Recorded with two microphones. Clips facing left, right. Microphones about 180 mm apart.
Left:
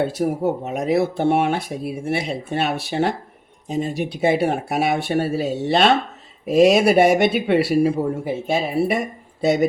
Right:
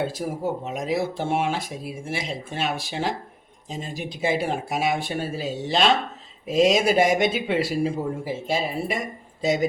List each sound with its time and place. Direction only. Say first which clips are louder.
0.2 s a man's voice: left 6 dB; 60° left (ahead or behind)